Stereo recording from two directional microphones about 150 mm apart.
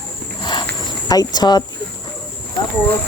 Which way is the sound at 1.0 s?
25° left (ahead or behind).